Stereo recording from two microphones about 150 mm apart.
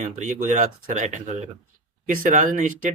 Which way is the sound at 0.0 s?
55° right (ahead or behind).